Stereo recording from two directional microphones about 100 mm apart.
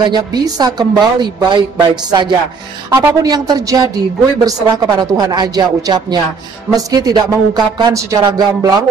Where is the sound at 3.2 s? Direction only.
40° right (ahead or behind).